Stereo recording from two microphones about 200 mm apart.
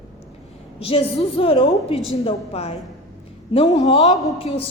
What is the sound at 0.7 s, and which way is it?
A woman's voice, 30° left (ahead or behind).